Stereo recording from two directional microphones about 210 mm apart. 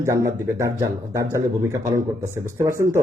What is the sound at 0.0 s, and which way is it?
Speech, 15° right (ahead or behind).